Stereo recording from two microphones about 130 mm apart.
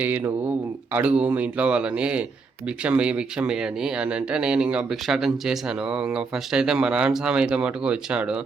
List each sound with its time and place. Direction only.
0.0 s speech: 15° right (ahead or behind)